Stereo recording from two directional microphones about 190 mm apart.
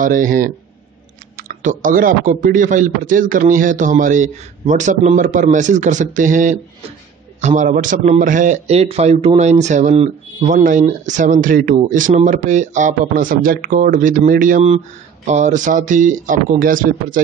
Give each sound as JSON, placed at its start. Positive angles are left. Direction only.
{"t": 0.0, "sound": "a man's voice", "side_deg": -45}